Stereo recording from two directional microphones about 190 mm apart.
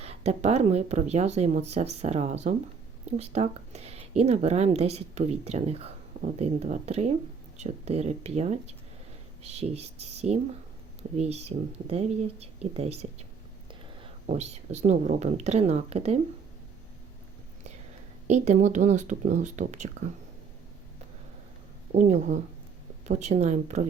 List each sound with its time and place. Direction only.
0.0 s speech: 35° right (ahead or behind)
14.3 s speech: 35° right (ahead or behind)
18.3 s speech: 35° right (ahead or behind)
21.9 s speech: 40° right (ahead or behind)